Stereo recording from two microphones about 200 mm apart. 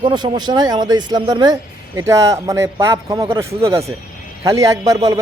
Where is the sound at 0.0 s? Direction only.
20° right (ahead or behind).